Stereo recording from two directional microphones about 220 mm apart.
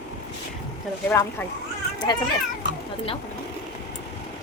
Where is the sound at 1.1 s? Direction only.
10° left (ahead or behind).